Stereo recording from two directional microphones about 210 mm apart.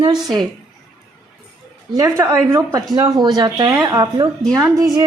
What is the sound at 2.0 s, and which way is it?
A woman's voice, 15° right (ahead or behind).